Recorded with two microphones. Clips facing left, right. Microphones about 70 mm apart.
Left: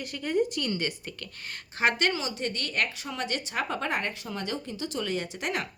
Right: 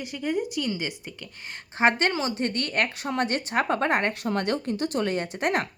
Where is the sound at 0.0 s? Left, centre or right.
Centre; by 5.6 s right.